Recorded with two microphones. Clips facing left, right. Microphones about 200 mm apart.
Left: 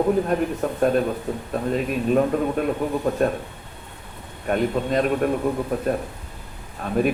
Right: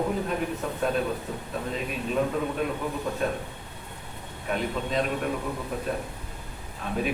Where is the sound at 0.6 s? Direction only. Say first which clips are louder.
Left 7 dB; 50° left (ahead or behind).